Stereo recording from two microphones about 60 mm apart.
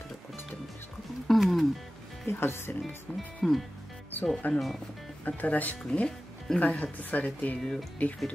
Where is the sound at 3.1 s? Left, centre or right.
Centre.